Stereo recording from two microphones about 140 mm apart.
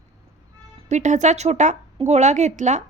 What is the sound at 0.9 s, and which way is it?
A woman's voice, 60° right (ahead or behind).